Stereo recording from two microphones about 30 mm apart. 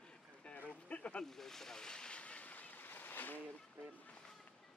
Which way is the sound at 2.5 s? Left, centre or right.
Left.